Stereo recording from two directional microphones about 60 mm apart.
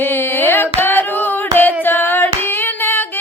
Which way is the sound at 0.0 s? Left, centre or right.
Left.